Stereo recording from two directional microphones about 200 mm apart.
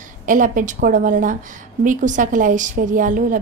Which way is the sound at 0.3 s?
40° right (ahead or behind).